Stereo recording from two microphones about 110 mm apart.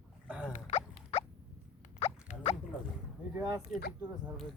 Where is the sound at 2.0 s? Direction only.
70° left (ahead or behind).